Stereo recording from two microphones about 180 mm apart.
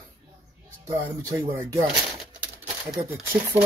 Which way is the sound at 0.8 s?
20° right (ahead or behind).